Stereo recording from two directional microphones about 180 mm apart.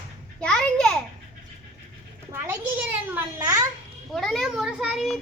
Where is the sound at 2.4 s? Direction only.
10° right (ahead or behind).